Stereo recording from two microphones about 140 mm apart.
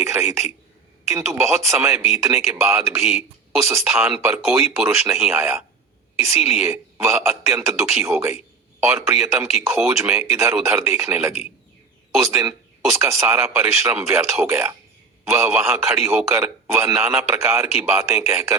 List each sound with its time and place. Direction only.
0.0 s a man's voice: 20° right (ahead or behind)
12.4 s a man's voice: 20° right (ahead or behind)